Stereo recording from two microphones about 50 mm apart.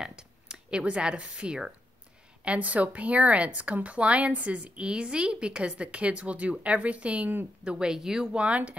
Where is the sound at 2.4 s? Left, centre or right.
Right.